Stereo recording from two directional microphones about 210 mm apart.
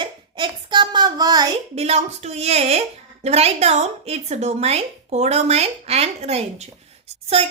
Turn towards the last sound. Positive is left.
turn(degrees=-30)  # may be behind; listen again after turning